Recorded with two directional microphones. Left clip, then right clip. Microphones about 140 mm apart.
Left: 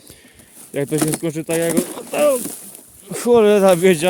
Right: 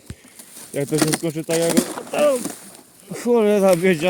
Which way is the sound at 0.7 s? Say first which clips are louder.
Left 2 dB; 40° left (ahead or behind).